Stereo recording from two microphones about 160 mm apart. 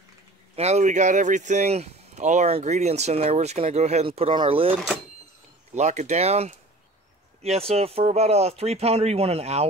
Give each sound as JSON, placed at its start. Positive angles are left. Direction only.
{"t": 0.6, "sound": "speech", "side_deg": -45}
{"t": 5.8, "sound": "speech", "side_deg": -45}